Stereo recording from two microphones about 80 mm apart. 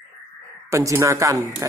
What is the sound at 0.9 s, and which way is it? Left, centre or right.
Speech, right.